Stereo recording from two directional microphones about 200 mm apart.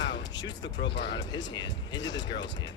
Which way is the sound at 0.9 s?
60° left (ahead or behind).